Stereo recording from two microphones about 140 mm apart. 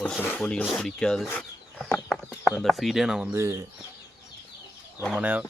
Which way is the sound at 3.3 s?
20° right (ahead or behind).